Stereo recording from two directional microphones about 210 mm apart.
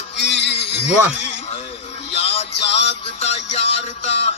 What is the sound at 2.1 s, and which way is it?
Music, 30° left (ahead or behind).